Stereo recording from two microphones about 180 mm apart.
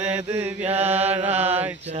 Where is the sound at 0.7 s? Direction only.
35° right (ahead or behind).